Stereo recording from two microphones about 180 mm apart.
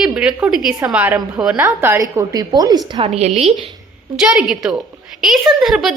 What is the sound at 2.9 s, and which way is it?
Speech, 35° right (ahead or behind).